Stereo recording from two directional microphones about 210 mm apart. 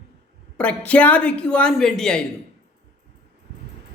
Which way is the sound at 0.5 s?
5° left (ahead or behind).